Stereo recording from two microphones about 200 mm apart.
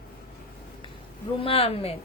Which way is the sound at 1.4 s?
30° left (ahead or behind).